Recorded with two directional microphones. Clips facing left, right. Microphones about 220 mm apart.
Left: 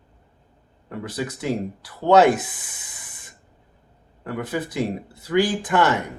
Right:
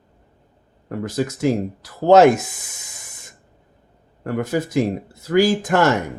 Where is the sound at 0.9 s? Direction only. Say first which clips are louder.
Right 6 dB; 45° right (ahead or behind).